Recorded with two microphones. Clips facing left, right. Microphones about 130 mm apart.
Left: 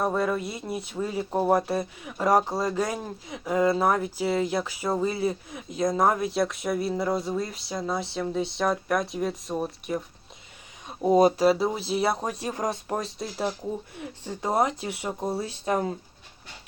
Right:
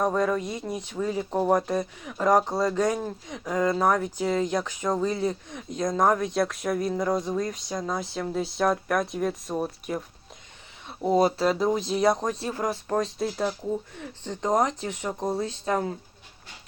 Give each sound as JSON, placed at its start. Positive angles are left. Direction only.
{"t": 0.0, "sound": "speech", "side_deg": 5}
{"t": 6.8, "sound": "a sound", "side_deg": 5}
{"t": 10.8, "sound": "speech", "side_deg": 20}
{"t": 11.4, "sound": "speech", "side_deg": 5}
{"t": 13.0, "sound": "a sound", "side_deg": 5}
{"t": 13.9, "sound": "speech", "side_deg": 10}